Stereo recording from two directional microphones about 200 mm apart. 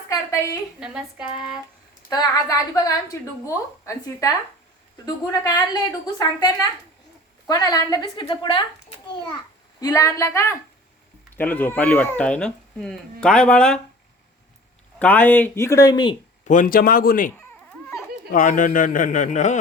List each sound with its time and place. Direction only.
2.0 s a woman's voice: 20° left (ahead or behind)
9.8 s speech: 15° left (ahead or behind)
14.9 s speech: 5° left (ahead or behind)
16.4 s a man's voice: 40° left (ahead or behind)